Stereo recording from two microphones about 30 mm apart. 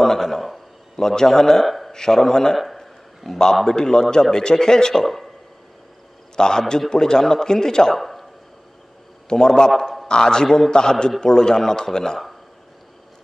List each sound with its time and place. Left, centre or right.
0.0 s a sound: centre
0.9 s a man's voice: centre
2.5 s a sound: centre
3.3 s a man's voice: centre
3.6 s a man's voice: left
5.0 s speech: centre
6.3 s a man's voice: left
7.9 s a man's voice: centre
9.3 s a man's voice: left